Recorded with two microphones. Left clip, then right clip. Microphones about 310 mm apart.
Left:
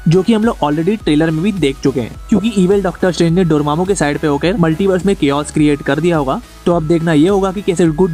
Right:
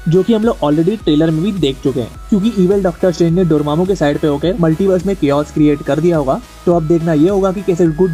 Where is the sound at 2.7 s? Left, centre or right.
Left.